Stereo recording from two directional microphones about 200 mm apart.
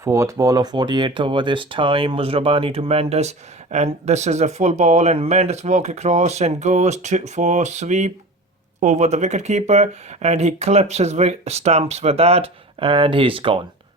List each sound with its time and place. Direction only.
0.0 s speech: 15° right (ahead or behind)